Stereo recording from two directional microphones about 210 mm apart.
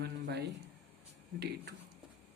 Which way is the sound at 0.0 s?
50° right (ahead or behind).